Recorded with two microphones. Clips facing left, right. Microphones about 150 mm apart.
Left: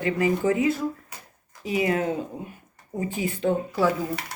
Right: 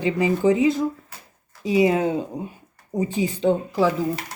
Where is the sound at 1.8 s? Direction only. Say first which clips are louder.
Right 4 dB; 20° right (ahead or behind).